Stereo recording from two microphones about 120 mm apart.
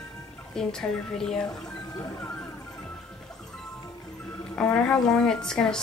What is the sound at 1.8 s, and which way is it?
Music, 25° left (ahead or behind).